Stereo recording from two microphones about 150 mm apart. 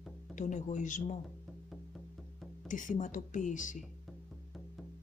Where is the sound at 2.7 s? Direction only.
60° left (ahead or behind).